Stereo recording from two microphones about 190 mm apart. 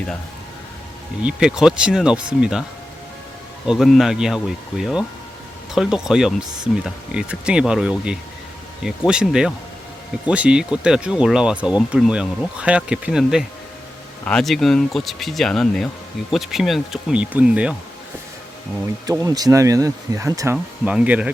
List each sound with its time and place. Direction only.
1.2 s speech: 5° right (ahead or behind)
3.7 s speech: centre (ahead or behind)
19.0 s speech: 20° right (ahead or behind)